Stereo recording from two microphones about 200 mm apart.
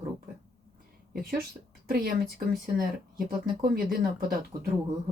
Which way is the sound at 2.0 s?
50° right (ahead or behind).